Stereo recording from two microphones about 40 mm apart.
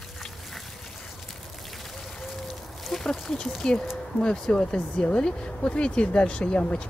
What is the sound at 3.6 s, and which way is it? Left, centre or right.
Speech, centre.